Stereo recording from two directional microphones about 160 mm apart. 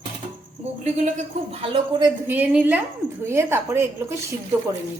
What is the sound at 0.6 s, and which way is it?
Cricket, 50° right (ahead or behind).